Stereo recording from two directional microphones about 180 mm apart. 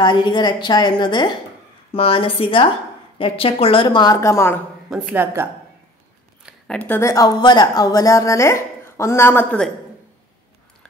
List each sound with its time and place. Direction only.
0.0 s a woman's voice: 25° left (ahead or behind)
4.8 s speech: 5° right (ahead or behind)
6.4 s speech: 5° left (ahead or behind)